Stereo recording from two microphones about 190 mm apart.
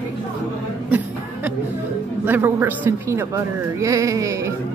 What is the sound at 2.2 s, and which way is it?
Speech, 10° right (ahead or behind).